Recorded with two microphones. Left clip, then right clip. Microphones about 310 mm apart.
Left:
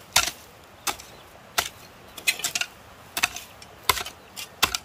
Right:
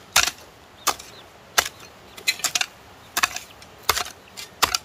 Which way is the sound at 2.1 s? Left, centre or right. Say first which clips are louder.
Right 1 dB; left.